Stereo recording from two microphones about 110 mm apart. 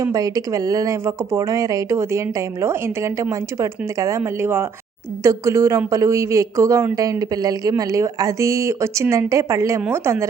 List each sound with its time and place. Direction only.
0.0 s speech: 35° right (ahead or behind)